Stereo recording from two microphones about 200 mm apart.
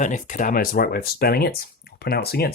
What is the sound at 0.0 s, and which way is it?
Speech, 40° left (ahead or behind).